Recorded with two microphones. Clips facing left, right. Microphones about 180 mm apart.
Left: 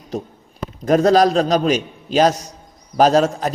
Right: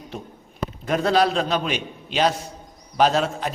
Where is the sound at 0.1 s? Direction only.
40° left (ahead or behind).